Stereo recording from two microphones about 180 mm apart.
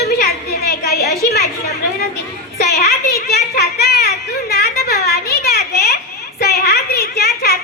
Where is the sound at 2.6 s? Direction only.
60° left (ahead or behind).